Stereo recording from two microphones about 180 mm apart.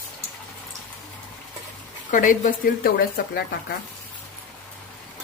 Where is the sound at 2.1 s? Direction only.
45° left (ahead or behind).